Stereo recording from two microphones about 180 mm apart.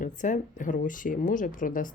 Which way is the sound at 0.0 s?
45° left (ahead or behind).